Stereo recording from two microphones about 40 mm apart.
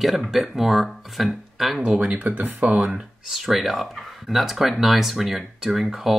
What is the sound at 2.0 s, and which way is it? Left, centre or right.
Speech, right.